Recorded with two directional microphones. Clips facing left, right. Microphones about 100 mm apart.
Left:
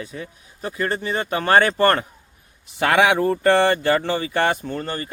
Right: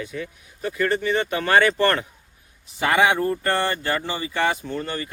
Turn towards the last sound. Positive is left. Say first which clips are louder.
# left 1 dB
turn(degrees=45)  # may be behind; listen again after turning